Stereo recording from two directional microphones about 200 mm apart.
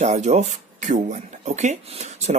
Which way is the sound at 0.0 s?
35° right (ahead or behind).